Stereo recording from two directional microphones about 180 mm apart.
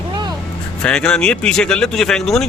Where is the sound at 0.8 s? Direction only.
5° left (ahead or behind).